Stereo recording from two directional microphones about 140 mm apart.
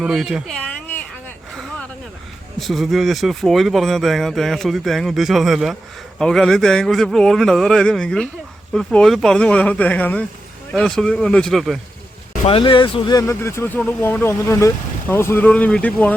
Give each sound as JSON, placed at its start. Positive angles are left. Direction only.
{"t": 0.0, "sound": "speech", "side_deg": -5}
{"t": 0.6, "sound": "a sound", "side_deg": 10}
{"t": 2.6, "sound": "speech", "side_deg": 0}
{"t": 12.5, "sound": "speech", "side_deg": 40}